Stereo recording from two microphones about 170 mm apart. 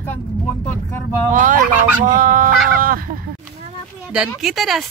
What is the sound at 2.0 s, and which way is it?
Fowl, 55° right (ahead or behind).